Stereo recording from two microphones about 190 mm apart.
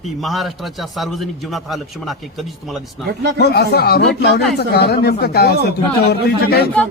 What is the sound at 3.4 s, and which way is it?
Speech, 60° left (ahead or behind).